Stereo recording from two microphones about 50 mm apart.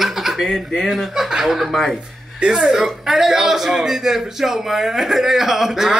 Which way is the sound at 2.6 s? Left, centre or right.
Centre.